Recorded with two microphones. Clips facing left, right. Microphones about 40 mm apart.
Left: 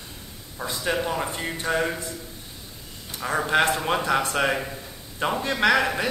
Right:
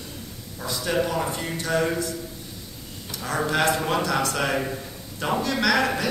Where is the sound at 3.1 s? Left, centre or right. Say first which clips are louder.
Left 2 dB; left.